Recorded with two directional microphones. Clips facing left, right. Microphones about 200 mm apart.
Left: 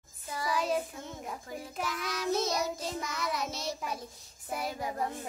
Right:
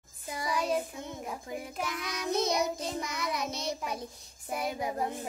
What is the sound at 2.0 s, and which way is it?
Child singing, 15° right (ahead or behind).